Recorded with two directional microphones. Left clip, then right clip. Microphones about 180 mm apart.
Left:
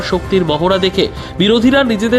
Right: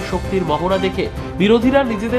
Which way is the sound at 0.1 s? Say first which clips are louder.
Left 5 dB; 25° left (ahead or behind).